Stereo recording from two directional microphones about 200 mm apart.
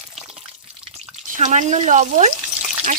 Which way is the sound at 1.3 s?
35° right (ahead or behind).